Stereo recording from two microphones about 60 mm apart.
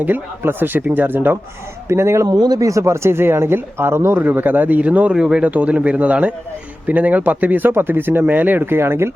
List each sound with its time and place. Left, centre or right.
0.0 s speech: right
1.9 s speech: right
2.2 s speech: right
4.2 s a man's voice: right
8.6 s speech: right